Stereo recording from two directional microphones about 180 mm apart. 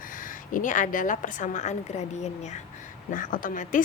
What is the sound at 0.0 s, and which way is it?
A woman's voice, 50° left (ahead or behind).